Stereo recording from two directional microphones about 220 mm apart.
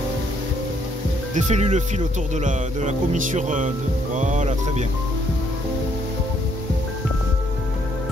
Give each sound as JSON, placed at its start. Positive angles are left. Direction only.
{"t": 1.3, "sound": "speech", "side_deg": -35}